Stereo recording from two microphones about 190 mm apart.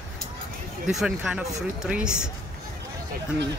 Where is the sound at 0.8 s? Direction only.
5° right (ahead or behind).